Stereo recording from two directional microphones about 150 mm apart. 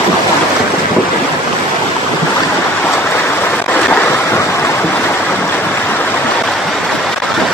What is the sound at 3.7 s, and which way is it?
Waves, 10° left (ahead or behind).